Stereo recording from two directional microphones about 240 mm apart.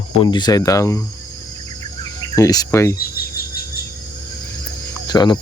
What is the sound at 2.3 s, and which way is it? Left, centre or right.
Cricket, centre.